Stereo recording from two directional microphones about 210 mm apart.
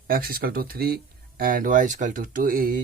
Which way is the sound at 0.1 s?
45° right (ahead or behind).